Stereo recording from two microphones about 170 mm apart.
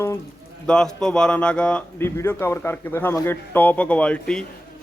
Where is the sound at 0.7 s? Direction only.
5° left (ahead or behind).